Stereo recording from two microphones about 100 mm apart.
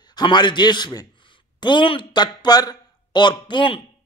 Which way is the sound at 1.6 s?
55° left (ahead or behind).